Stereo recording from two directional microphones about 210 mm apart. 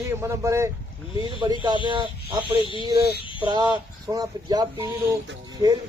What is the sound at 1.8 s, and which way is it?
Speech, 20° right (ahead or behind).